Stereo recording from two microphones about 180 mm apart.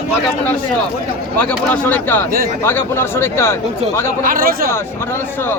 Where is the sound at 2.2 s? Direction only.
55° right (ahead or behind).